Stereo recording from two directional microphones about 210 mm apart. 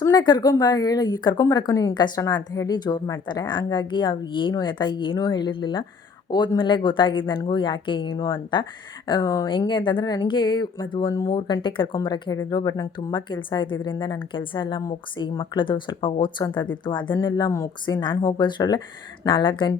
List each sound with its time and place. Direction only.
0.0 s a woman's voice: 20° left (ahead or behind)